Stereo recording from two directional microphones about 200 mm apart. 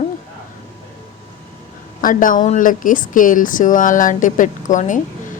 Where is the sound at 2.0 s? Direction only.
40° left (ahead or behind).